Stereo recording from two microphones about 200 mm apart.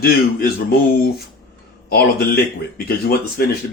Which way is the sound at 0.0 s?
50° left (ahead or behind).